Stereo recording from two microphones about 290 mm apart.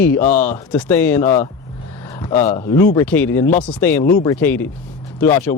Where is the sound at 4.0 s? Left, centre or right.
Left.